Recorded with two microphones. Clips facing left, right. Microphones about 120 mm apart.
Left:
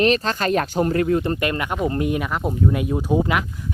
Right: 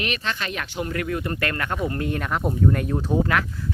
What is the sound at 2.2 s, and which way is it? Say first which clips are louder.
Speech: even; centre (ahead or behind).